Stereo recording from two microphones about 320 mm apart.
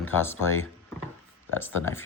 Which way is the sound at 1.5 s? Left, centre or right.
Centre.